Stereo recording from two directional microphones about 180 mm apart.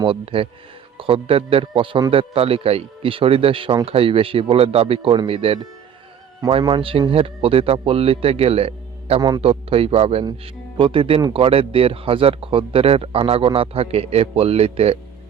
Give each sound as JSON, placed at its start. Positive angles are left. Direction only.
{"t": 0.0, "sound": "speech", "side_deg": -30}